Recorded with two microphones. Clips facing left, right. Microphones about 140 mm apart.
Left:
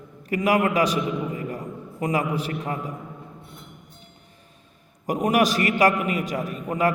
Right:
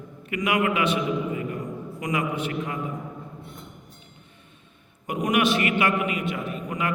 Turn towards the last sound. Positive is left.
turn(degrees=40)  # may be behind; listen again after turning